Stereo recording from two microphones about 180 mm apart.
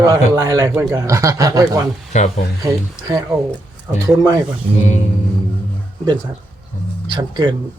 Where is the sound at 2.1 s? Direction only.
40° left (ahead or behind).